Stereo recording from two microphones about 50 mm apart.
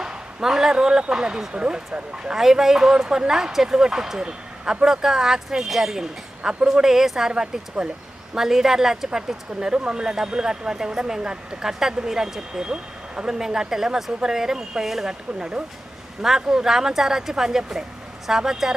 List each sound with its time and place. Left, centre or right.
0.4 s speech: centre
15.4 s speech: centre